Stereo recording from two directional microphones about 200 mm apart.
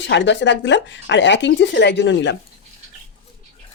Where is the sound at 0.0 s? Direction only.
65° left (ahead or behind).